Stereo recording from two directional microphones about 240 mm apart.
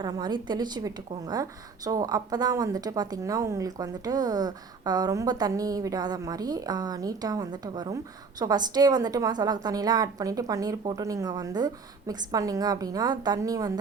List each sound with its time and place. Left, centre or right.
0.0 s a woman's voice: centre